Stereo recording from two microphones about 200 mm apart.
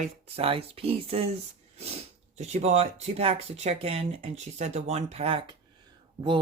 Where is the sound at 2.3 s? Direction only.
35° right (ahead or behind).